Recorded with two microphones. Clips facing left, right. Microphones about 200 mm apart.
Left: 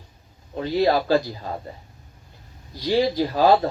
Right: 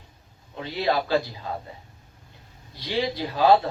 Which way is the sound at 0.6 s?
45° left (ahead or behind).